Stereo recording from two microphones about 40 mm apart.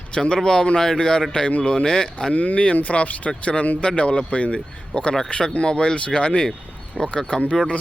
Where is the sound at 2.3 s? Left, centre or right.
Left.